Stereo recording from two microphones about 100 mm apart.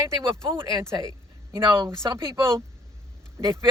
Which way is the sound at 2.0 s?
45° right (ahead or behind).